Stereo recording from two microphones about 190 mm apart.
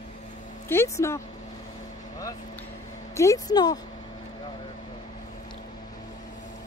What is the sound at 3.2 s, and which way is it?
Speech, 20° left (ahead or behind).